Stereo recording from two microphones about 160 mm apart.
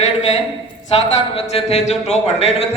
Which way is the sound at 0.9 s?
35° left (ahead or behind).